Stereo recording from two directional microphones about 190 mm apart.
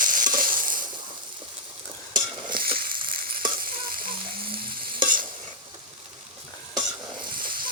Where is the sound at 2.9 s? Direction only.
50° right (ahead or behind).